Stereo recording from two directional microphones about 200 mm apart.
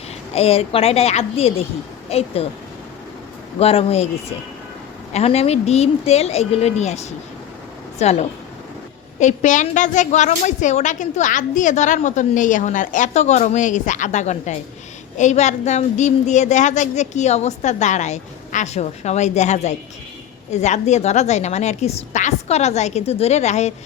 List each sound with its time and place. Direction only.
0.3 s a woman's voice: 30° left (ahead or behind)
3.6 s a woman's voice: 30° left (ahead or behind)